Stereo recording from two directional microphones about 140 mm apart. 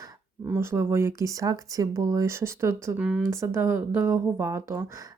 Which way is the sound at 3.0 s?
5° right (ahead or behind).